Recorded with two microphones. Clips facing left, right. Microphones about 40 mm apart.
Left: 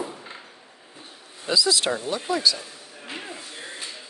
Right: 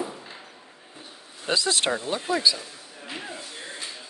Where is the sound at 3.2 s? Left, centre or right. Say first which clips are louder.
Even; centre.